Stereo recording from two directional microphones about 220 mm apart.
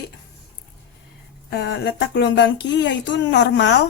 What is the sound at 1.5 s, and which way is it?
Speech, 50° left (ahead or behind).